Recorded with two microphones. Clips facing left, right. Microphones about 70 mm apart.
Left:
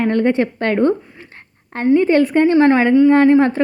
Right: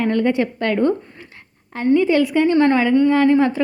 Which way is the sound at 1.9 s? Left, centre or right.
Left.